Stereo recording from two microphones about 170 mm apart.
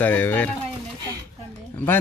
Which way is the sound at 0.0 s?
10° left (ahead or behind).